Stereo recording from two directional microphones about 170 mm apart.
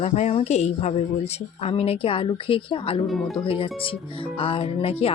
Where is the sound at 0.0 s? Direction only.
40° left (ahead or behind).